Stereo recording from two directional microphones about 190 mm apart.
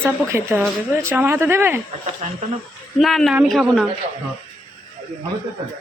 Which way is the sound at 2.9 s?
Centre (ahead or behind).